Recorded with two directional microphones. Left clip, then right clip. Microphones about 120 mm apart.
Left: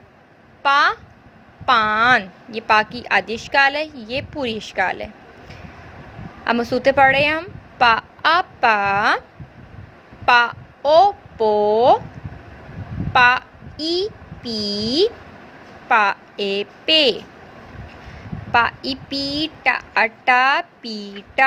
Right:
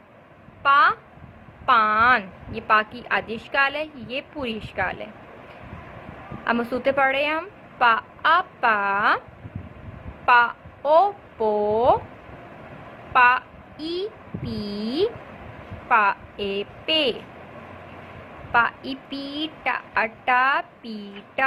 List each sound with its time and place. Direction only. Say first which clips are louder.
0.6 s a sound: left 1 dB; 45° left (ahead or behind)
1.6 s a woman's voice: left 2 dB; 45° left (ahead or behind)
6.4 s a woman's voice: left 5 dB; 45° left (ahead or behind)
10.2 s a child's voice: left 2 dB; 45° left (ahead or behind)
13.1 s a woman's voice: left 3 dB; 45° left (ahead or behind)
18.5 s a woman's voice: left 3 dB; 45° left (ahead or behind)